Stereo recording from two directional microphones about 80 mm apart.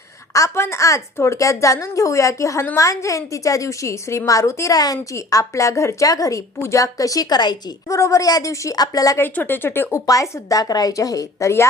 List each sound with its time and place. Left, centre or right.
0.3 s a woman's voice: left
7.9 s a woman's voice: left
9.3 s speech: left
10.1 s a woman's voice: left